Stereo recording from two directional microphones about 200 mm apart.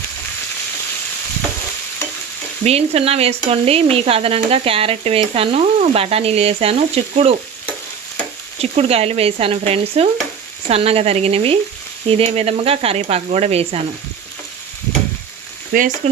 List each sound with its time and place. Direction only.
2.6 s speech: 30° right (ahead or behind)
8.7 s speech: 30° right (ahead or behind)
15.7 s frying: 45° right (ahead or behind)